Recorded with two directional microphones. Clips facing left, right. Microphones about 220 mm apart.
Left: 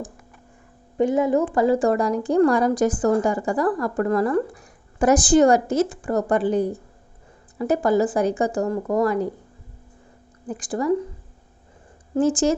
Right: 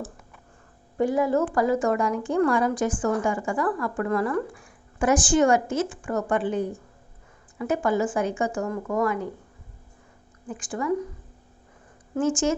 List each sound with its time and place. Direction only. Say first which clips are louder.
0.9 s a woman's voice: left 3 dB; 20° left (ahead or behind); by 9.3 s 35° left (ahead or behind)
10.4 s a woman's voice: left 5 dB; 35° left (ahead or behind)
12.2 s a woman's voice: left 4 dB; 35° left (ahead or behind)